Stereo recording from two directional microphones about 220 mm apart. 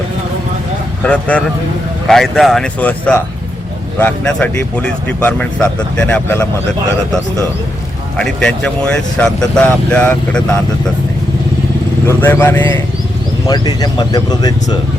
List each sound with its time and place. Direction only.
1.0 s speech: 5° left (ahead or behind)
8.2 s speech: 5° left (ahead or behind)
12.0 s speech: 10° left (ahead or behind)